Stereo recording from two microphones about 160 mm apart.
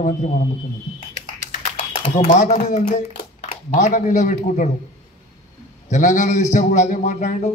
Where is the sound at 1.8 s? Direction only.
50° left (ahead or behind).